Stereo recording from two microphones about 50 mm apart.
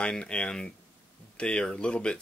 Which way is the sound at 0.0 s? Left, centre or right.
Left.